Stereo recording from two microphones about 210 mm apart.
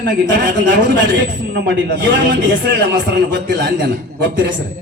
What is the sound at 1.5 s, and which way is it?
A man's voice, 55° right (ahead or behind).